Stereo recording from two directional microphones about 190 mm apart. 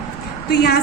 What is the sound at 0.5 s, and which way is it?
Speech, 55° left (ahead or behind).